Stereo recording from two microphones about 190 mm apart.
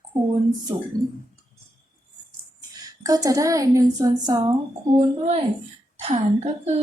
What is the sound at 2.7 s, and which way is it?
A woman's voice, 20° right (ahead or behind).